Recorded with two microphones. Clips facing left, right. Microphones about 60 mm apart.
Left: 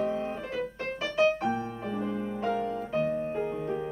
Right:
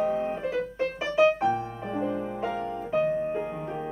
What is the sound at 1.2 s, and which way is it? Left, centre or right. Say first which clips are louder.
Music: right 4 dB; centre.